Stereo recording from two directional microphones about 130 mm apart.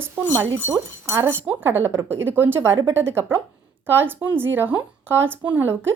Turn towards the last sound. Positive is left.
turn(degrees=-15)  # may be behind; listen again after turning